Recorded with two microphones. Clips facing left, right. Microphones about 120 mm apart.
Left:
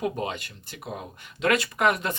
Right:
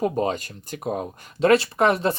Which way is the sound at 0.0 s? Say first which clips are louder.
Right 6 dB; 35° right (ahead or behind).